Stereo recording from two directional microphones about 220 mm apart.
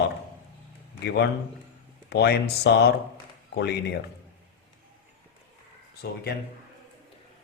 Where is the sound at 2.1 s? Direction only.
50° left (ahead or behind).